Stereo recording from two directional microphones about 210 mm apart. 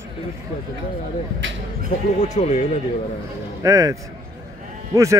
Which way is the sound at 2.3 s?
35° left (ahead or behind).